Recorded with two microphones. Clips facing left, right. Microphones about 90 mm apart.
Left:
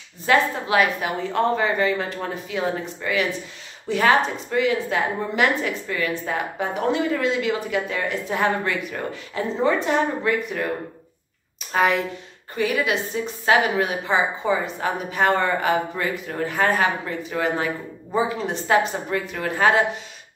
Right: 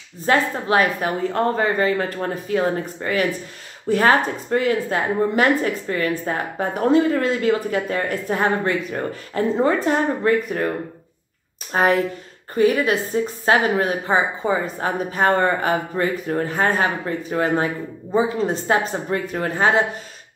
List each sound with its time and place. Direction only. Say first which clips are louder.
0.3 s a woman's voice: right 1 dB; 35° right (ahead or behind)
11.7 s a woman's voice: right 2 dB; 40° right (ahead or behind)